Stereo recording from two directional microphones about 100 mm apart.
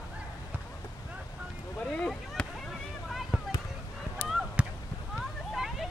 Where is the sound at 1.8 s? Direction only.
5° left (ahead or behind).